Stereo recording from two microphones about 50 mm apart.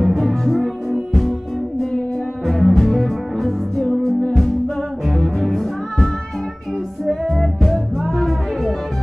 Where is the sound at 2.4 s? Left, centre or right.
Centre.